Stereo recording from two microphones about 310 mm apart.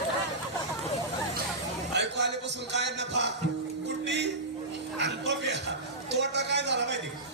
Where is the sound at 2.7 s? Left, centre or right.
Right.